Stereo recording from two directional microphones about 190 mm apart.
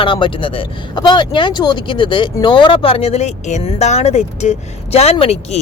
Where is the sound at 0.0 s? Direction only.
25° left (ahead or behind).